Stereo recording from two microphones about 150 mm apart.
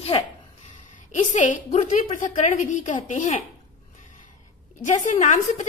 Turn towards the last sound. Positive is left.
turn(degrees=55)  # may be behind; listen again after turning